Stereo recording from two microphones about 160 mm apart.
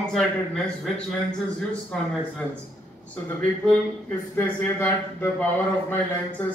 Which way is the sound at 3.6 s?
10° left (ahead or behind).